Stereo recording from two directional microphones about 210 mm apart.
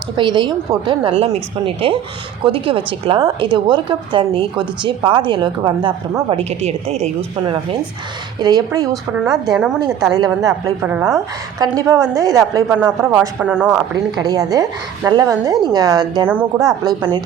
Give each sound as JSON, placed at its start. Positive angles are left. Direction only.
{"t": 0.2, "sound": "a woman's voice", "side_deg": -20}
{"t": 8.9, "sound": "a woman's voice", "side_deg": 0}
{"t": 10.1, "sound": "a woman's voice", "side_deg": -15}
{"t": 13.9, "sound": "a woman's voice", "side_deg": -20}
{"t": 16.2, "sound": "a woman's voice", "side_deg": -5}